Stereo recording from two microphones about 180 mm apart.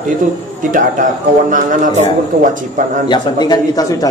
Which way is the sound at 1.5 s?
45° right (ahead or behind).